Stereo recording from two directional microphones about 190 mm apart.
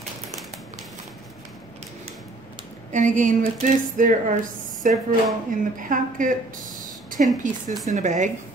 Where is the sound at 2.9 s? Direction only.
40° right (ahead or behind).